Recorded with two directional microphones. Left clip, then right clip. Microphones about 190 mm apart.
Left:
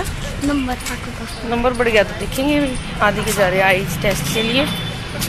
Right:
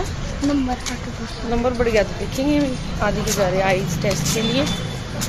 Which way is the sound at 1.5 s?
Centre (ahead or behind).